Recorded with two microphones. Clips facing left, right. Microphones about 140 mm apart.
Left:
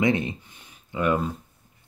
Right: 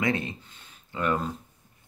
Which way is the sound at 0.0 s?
20° left (ahead or behind).